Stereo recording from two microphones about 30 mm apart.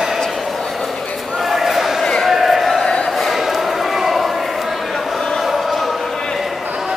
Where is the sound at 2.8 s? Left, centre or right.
Left.